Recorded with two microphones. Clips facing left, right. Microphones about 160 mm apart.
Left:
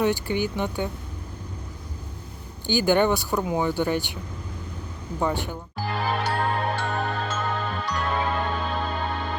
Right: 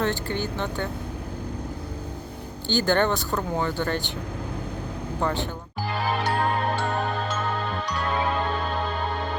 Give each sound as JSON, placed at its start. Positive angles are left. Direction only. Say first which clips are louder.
{"t": 0.0, "sound": "speech", "louder": "left 3 dB", "side_deg": 15}
{"t": 2.6, "sound": "speech", "louder": "left 2 dB", "side_deg": 15}
{"t": 5.2, "sound": "speech", "louder": "left 1 dB", "side_deg": 10}
{"t": 5.8, "sound": "music", "louder": "even", "side_deg": 0}